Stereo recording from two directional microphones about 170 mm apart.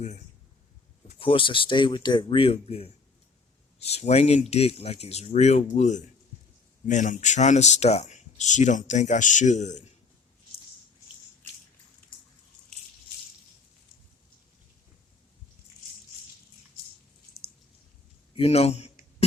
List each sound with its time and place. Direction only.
1.0 s speech: 30° left (ahead or behind)
18.3 s speech: 35° left (ahead or behind)